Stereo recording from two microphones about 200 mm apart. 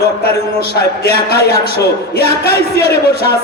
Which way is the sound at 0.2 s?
50° left (ahead or behind).